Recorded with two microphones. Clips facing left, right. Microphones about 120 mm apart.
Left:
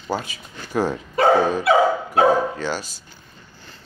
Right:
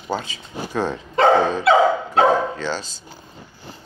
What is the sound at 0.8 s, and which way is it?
Speech, 25° right (ahead or behind).